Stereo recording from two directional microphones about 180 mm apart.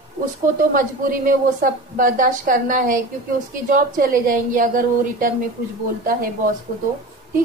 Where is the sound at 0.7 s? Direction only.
50° right (ahead or behind).